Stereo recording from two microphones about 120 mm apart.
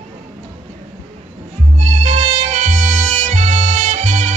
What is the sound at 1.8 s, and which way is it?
Music, 70° right (ahead or behind).